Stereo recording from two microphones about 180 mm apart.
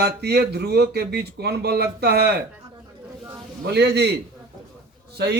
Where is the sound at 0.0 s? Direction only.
65° right (ahead or behind).